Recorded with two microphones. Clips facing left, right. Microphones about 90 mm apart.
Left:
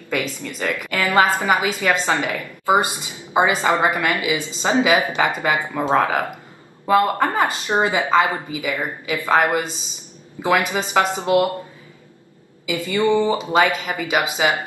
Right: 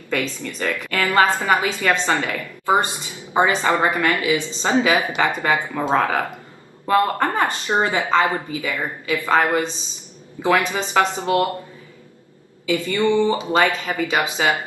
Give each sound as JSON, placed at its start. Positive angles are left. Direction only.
{"t": 0.1, "sound": "a woman's voice", "side_deg": 15}
{"t": 12.6, "sound": "a woman's voice", "side_deg": 15}